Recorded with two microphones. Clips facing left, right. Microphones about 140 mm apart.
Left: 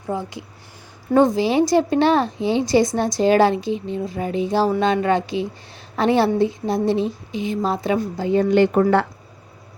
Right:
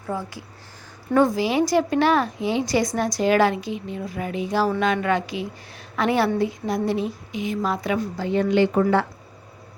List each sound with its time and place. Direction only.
0.1 s a woman's voice: 20° left (ahead or behind)
8.4 s a woman's voice: 50° left (ahead or behind)